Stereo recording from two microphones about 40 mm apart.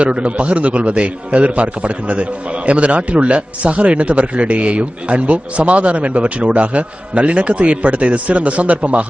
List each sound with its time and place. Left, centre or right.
0.0 s a man's voice: right